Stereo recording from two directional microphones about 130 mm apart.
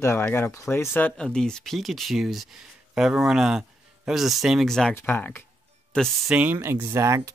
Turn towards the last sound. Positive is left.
turn(degrees=-25)  # may be behind; listen again after turning